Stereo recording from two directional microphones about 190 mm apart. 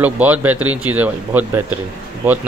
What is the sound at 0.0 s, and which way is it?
Speech, 10° right (ahead or behind).